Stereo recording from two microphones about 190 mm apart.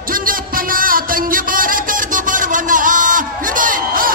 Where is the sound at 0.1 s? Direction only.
45° right (ahead or behind).